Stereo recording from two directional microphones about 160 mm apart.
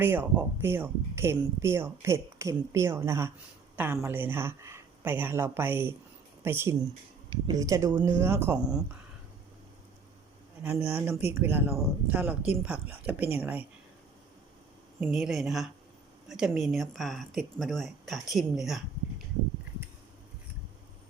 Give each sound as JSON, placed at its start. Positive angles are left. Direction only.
{"t": 0.0, "sound": "speech", "side_deg": -10}
{"t": 10.6, "sound": "speech", "side_deg": -10}
{"t": 15.0, "sound": "speech", "side_deg": 0}